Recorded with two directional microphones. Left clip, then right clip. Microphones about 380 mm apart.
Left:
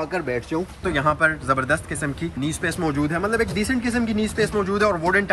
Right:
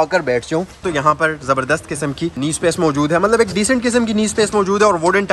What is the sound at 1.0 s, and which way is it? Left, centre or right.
Speech, centre.